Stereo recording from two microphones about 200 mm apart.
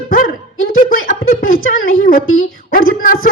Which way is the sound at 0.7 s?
45° left (ahead or behind).